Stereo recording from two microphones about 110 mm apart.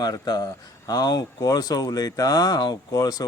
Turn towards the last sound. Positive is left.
turn(degrees=35)  # may be behind; listen again after turning